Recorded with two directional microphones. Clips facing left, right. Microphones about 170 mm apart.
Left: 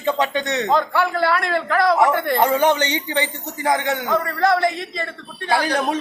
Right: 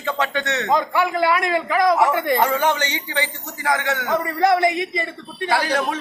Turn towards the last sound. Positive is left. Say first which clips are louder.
# left 1 dB
turn(degrees=15)  # may be behind; listen again after turning